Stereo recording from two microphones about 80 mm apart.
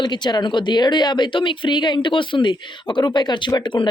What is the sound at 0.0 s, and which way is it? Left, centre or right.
Speech, left.